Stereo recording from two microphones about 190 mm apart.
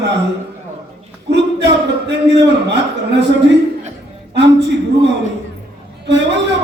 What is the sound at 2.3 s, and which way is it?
Speech, 65° right (ahead or behind).